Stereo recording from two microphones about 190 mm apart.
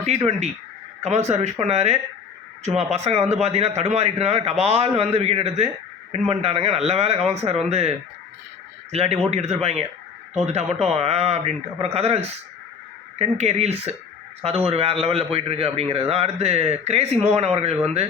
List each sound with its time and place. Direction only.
0.3 s a man's voice: 35° right (ahead or behind)